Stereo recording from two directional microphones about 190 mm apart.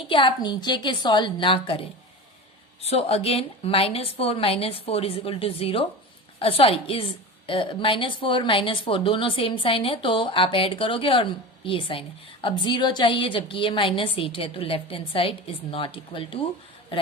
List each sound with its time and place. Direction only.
0.1 s a woman's voice: 25° left (ahead or behind)
2.8 s a woman's voice: 30° left (ahead or behind)